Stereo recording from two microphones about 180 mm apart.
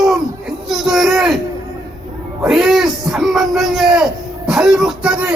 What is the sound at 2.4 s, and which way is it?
Speech, 5° right (ahead or behind).